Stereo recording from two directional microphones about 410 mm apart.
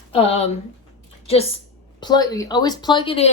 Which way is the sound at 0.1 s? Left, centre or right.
Centre.